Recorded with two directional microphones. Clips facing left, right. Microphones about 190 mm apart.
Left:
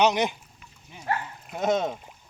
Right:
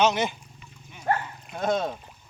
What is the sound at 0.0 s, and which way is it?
Speech, 15° left (ahead or behind).